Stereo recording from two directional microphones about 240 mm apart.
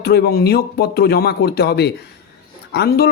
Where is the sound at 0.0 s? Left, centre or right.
Left.